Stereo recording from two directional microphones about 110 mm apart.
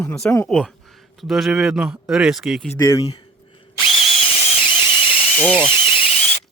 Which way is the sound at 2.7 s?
25° left (ahead or behind).